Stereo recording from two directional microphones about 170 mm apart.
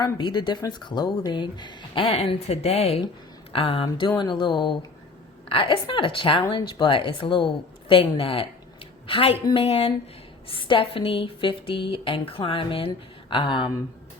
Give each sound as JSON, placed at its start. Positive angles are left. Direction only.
{"t": 0.0, "sound": "speech", "side_deg": 25}